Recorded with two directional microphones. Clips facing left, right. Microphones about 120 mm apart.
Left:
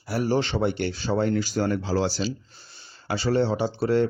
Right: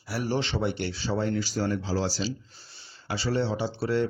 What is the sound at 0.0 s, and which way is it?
Speech, 45° left (ahead or behind).